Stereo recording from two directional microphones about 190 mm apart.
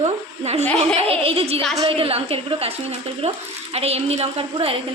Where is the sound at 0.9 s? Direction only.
30° right (ahead or behind).